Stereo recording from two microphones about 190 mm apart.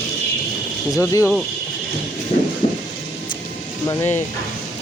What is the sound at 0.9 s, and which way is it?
Speech, 15° left (ahead or behind).